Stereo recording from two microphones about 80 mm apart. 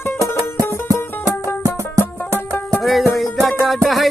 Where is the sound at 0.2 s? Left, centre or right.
Right.